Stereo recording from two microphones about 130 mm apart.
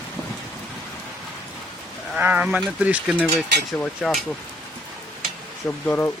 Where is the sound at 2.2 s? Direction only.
10° right (ahead or behind).